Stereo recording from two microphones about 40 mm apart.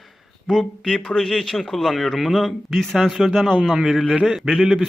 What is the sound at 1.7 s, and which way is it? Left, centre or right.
A man's voice, centre.